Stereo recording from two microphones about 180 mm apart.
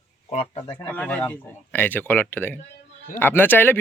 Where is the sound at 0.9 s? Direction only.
10° left (ahead or behind).